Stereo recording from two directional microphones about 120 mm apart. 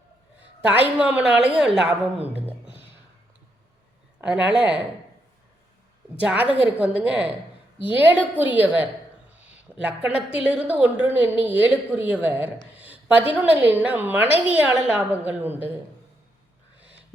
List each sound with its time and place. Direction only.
0.9 s a woman's voice: 10° right (ahead or behind)
2.2 s music: 15° right (ahead or behind)
4.2 s a woman's voice: 10° right (ahead or behind)
6.1 s a woman's voice: 10° right (ahead or behind)